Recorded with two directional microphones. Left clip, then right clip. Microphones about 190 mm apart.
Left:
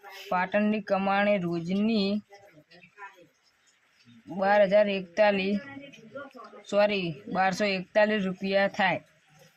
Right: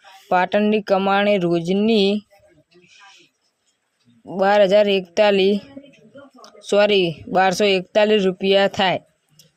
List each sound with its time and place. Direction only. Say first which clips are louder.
0.3 s speech: right 9 dB; 40° right (ahead or behind)
4.4 s speech: right 7 dB; 35° right (ahead or behind)
6.7 s speech: right 9 dB; 40° right (ahead or behind)